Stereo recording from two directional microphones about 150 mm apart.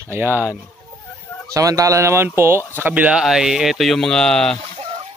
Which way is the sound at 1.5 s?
20° right (ahead or behind).